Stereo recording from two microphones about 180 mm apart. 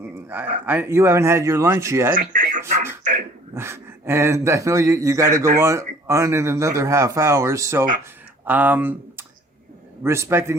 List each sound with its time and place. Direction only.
0.1 s a man's voice: 10° right (ahead or behind)
2.1 s speech: 45° right (ahead or behind)
3.5 s a man's voice: 15° right (ahead or behind)